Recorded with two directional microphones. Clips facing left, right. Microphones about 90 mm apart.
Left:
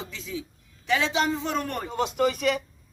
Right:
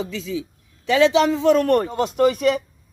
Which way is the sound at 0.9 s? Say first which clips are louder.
Right 9 dB; 90° right.